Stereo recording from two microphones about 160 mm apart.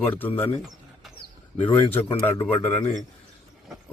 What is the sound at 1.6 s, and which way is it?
A man's voice, 10° left (ahead or behind).